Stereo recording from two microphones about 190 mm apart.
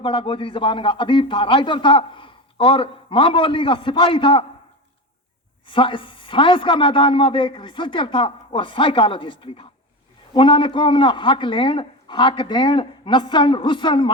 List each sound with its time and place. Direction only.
0.0 s a man's voice: 25° left (ahead or behind)
5.6 s a man's voice: 25° left (ahead or behind)